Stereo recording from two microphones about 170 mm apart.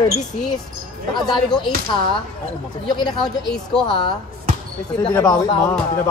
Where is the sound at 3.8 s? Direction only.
30° left (ahead or behind).